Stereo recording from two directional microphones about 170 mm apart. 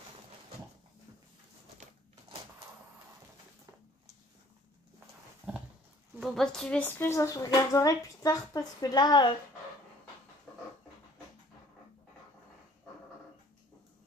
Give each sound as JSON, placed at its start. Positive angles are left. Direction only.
{"t": 5.5, "sound": "dog", "side_deg": -5}
{"t": 6.2, "sound": "a woman's voice", "side_deg": 0}